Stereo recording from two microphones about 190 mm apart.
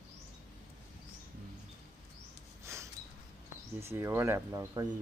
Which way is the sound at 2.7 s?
15° right (ahead or behind).